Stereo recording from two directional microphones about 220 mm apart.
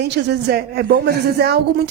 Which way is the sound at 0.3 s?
45° right (ahead or behind).